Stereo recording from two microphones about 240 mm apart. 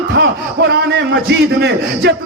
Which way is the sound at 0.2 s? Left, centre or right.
Right.